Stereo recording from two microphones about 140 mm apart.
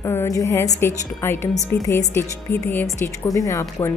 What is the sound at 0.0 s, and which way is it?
A woman's voice, 20° left (ahead or behind).